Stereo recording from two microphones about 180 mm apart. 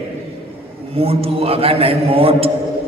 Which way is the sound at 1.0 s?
35° right (ahead or behind).